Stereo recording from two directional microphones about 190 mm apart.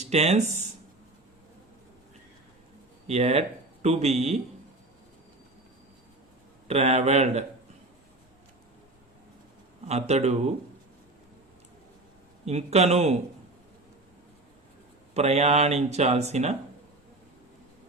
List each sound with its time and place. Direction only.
0.0 s speech: 35° right (ahead or behind)
3.1 s speech: 35° right (ahead or behind)
6.7 s speech: 35° right (ahead or behind)
9.8 s speech: 35° right (ahead or behind)
12.5 s speech: 35° right (ahead or behind)
15.1 s speech: 35° right (ahead or behind)